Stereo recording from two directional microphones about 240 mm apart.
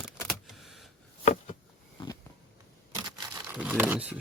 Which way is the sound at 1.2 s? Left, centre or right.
Left.